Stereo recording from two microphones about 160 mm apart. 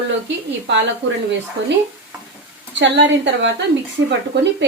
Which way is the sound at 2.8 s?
90° right.